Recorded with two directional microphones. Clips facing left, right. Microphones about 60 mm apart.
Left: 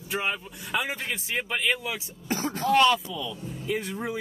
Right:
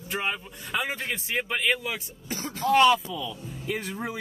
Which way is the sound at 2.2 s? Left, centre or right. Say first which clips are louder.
Left 6 dB; left.